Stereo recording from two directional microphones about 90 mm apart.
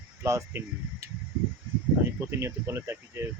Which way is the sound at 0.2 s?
30° right (ahead or behind).